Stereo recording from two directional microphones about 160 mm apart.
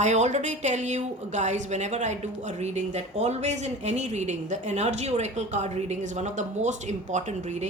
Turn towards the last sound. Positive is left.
turn(degrees=-45)  # may be behind; listen again after turning